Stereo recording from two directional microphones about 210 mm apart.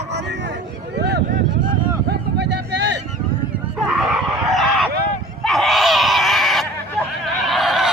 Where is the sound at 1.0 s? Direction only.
55° right (ahead or behind).